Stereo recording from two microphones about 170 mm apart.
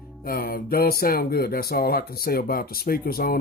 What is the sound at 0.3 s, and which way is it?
Speech, 60° left (ahead or behind).